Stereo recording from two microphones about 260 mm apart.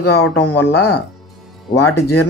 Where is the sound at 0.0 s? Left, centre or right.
Left.